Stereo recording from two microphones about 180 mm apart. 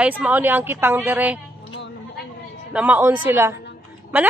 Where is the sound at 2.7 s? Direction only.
5° right (ahead or behind).